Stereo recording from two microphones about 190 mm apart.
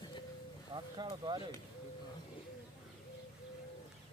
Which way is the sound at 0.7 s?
25° right (ahead or behind).